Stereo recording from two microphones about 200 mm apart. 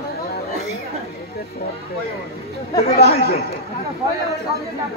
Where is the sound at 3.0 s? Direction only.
50° left (ahead or behind).